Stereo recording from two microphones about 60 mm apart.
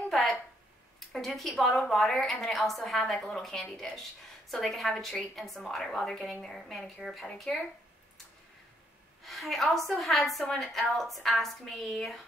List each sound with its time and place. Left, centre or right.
0.1 s a sound: centre
0.9 s a woman's voice: centre
7.5 s speech: centre
9.2 s a woman's voice: centre